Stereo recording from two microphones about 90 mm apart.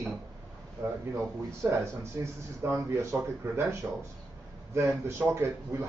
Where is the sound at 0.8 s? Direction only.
30° right (ahead or behind).